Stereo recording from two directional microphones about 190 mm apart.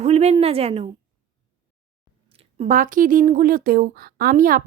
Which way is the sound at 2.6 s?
45° right (ahead or behind).